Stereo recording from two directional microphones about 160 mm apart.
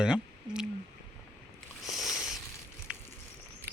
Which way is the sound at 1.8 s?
Centre (ahead or behind).